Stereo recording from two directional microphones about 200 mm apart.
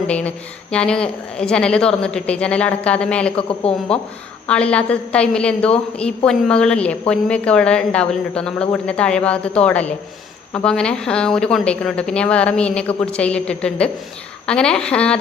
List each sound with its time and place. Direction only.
0.1 s a woman's voice: 5° left (ahead or behind)
3.6 s speech: 30° left (ahead or behind)
4.4 s a woman's voice: 5° left (ahead or behind)